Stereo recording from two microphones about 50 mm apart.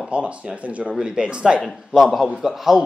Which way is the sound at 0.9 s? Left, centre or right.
Centre.